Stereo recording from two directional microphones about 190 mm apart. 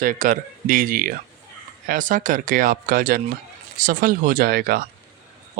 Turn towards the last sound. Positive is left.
turn(degrees=-55)  # may be behind; listen again after turning